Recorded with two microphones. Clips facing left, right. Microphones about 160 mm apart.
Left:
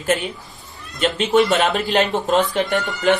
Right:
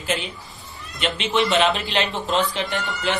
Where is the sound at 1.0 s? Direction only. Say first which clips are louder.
Left 6 dB; 45° left (ahead or behind).